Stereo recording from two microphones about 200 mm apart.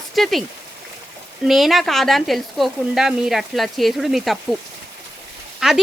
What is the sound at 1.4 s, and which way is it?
Speech, centre (ahead or behind).